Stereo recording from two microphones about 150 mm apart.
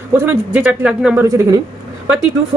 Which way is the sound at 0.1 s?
15° right (ahead or behind).